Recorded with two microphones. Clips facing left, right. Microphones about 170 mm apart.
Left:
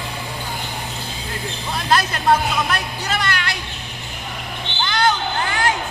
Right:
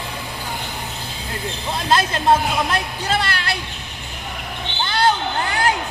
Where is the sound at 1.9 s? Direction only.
25° right (ahead or behind).